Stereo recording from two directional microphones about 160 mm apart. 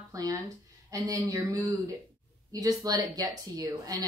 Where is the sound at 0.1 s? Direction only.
20° right (ahead or behind).